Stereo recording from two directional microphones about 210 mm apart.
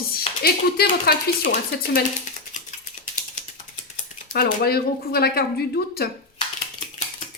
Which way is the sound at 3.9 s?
40° left (ahead or behind).